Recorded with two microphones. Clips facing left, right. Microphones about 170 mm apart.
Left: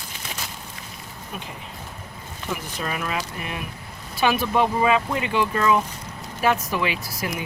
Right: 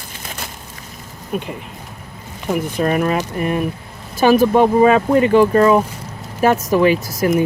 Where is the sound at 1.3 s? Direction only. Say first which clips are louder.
Right 12 dB; 55° right (ahead or behind).